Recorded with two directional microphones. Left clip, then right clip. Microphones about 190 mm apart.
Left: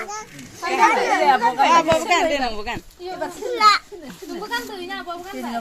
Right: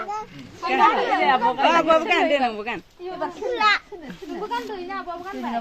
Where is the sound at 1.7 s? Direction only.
50° right (ahead or behind).